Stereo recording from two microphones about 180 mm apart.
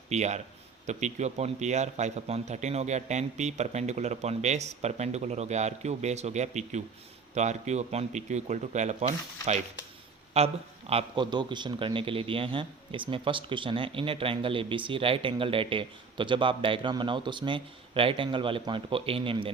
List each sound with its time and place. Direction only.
0.1 s a man's voice: 40° right (ahead or behind)